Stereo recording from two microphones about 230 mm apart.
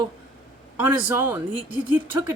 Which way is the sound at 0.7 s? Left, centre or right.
Centre.